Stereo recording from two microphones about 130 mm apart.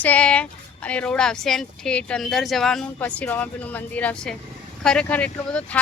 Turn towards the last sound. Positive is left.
turn(degrees=10)  # may be behind; listen again after turning